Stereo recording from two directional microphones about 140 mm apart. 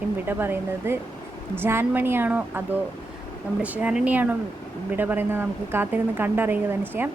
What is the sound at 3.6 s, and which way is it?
Speech, 10° right (ahead or behind).